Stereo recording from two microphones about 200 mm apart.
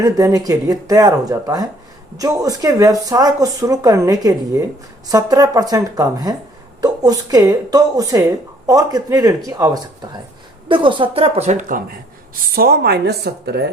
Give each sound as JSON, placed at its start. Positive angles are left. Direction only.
{"t": 0.0, "sound": "speech", "side_deg": -20}
{"t": 12.3, "sound": "a woman's voice", "side_deg": -50}